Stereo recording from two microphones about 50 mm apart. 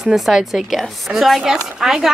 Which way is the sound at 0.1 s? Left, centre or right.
Centre.